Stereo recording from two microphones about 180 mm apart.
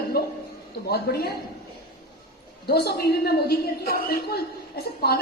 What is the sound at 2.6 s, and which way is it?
A woman's voice, 60° left (ahead or behind).